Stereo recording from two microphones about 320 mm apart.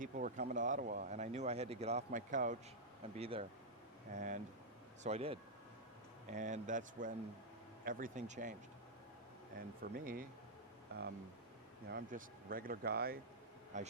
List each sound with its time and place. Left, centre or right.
0.0 s speech: right
9.6 s speech: right
11.9 s speech: right